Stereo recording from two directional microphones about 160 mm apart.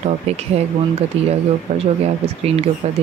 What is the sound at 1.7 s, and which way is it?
Speech, 45° right (ahead or behind).